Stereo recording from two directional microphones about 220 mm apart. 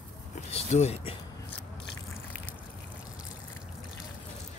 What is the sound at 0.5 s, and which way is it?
Speech, 30° left (ahead or behind).